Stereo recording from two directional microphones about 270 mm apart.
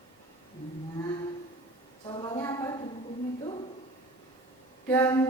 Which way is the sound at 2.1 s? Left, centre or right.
Centre.